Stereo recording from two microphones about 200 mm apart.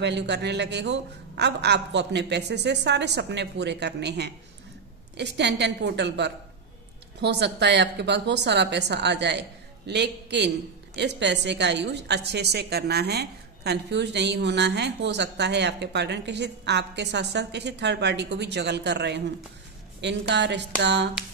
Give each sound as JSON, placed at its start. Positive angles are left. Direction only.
{"t": 0.0, "sound": "a woman's voice", "side_deg": -60}